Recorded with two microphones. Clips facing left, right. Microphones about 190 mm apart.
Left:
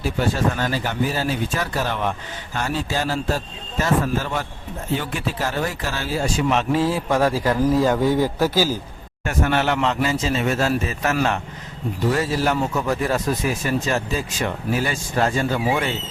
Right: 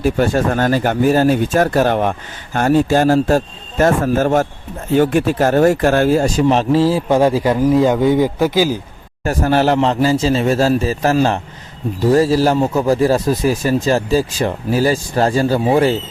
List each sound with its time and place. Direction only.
0.0 s speech: 50° right (ahead or behind)
6.4 s a man's voice: 30° right (ahead or behind); by 8.7 s 15° right (ahead or behind)
9.2 s speech: 35° right (ahead or behind)